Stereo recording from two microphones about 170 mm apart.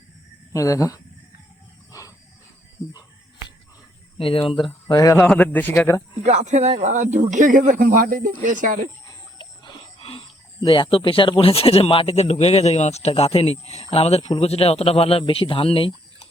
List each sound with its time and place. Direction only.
0.5 s speech: 20° left (ahead or behind)
1.9 s wild animals: 20° left (ahead or behind)
4.2 s speech: 30° left (ahead or behind)
4.9 s speech: 20° left (ahead or behind)
5.2 s speech: 10° left (ahead or behind)
6.2 s speech: 45° right (ahead or behind)
9.0 s speech: 25° left (ahead or behind)